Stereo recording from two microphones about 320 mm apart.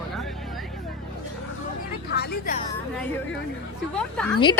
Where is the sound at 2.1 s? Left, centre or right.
Left.